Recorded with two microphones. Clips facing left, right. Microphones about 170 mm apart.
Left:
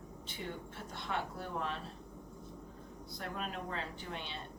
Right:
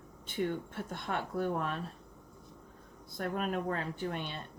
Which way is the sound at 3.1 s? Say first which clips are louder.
Right 8 dB; 50° right (ahead or behind).